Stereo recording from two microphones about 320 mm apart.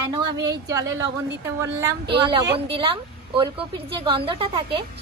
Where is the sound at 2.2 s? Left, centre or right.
Centre.